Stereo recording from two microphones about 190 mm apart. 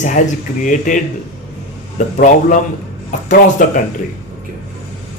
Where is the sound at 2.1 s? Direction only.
45° left (ahead or behind).